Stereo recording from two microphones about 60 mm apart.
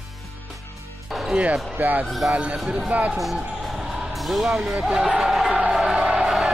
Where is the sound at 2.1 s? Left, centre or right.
Centre.